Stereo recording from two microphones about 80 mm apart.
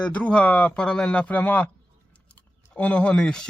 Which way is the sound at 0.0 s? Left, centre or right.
Centre.